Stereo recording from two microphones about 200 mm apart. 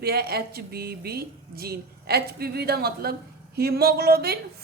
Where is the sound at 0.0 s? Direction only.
50° right (ahead or behind).